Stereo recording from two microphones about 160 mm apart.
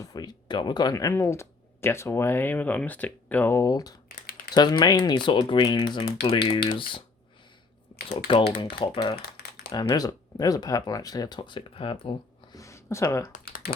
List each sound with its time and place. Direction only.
0.0 s speech: 25° left (ahead or behind)
7.9 s typing: 30° left (ahead or behind)
8.4 s speech: 80° left
9.0 s speech: 30° left (ahead or behind)
9.2 s crumpling: 85° left
9.7 s speech: 25° left (ahead or behind)
12.5 s speech: 20° left (ahead or behind)
13.3 s typing: 60° left (ahead or behind)